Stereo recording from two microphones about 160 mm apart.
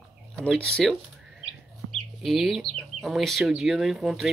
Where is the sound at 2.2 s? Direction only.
Centre (ahead or behind).